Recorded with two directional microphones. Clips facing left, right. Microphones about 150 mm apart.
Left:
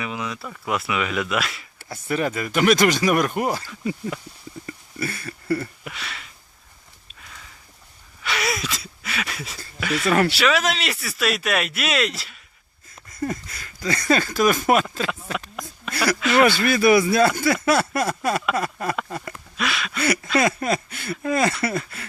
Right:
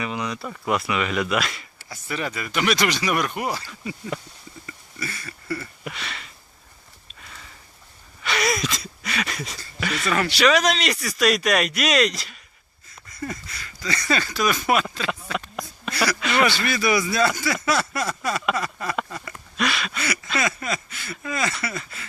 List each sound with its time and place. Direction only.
0.0 s speech: centre (ahead or behind)
1.8 s speech: 50° left (ahead or behind)
4.6 s a sound: 55° left (ahead or behind)
5.8 s speech: centre (ahead or behind)
7.1 s a sound: centre (ahead or behind)
9.8 s speech: 5° left (ahead or behind)
13.1 s speech: 50° left (ahead or behind)
16.4 s speech: 55° left (ahead or behind)
19.5 s speech: centre (ahead or behind)
20.3 s speech: 55° left (ahead or behind)